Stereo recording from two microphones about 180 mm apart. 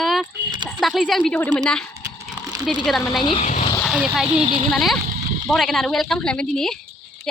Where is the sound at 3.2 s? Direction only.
30° left (ahead or behind).